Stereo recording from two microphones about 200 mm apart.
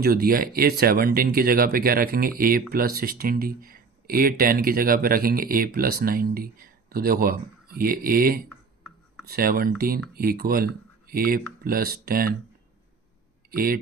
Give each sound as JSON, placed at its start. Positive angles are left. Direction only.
{"t": 0.0, "sound": "speech", "side_deg": -50}
{"t": 13.5, "sound": "speech", "side_deg": -45}